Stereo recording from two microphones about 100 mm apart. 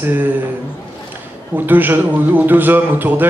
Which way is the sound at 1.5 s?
20° right (ahead or behind).